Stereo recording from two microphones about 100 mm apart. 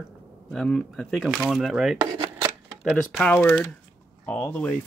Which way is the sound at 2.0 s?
50° right (ahead or behind).